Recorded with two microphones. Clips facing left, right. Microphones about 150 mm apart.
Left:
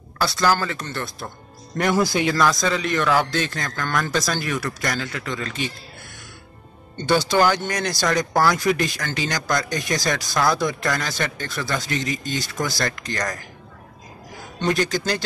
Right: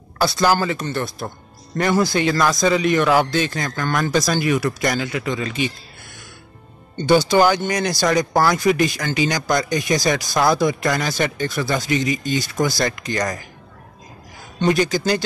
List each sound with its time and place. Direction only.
0.2 s speech: 15° right (ahead or behind)
1.8 s speech: centre (ahead or behind)
2.4 s speech: 10° right (ahead or behind)
7.1 s speech: 10° right (ahead or behind)
14.6 s speech: 5° right (ahead or behind)